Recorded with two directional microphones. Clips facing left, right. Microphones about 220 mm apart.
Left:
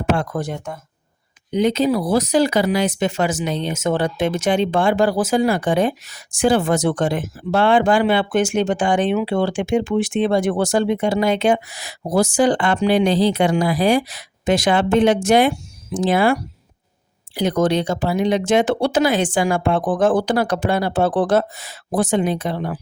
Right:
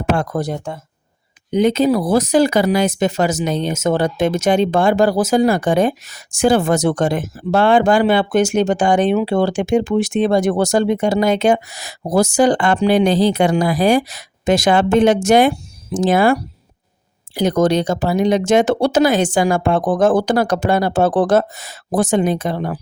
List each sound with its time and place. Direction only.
0.0 s speech: 40° right (ahead or behind)
1.5 s speech: 50° right (ahead or behind)